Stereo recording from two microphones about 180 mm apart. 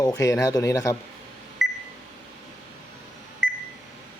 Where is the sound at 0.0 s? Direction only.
20° left (ahead or behind).